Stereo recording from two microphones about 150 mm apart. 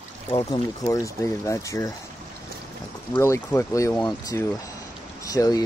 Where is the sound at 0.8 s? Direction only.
20° left (ahead or behind).